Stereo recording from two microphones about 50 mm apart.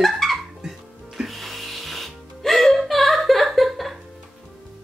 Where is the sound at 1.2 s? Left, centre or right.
Centre.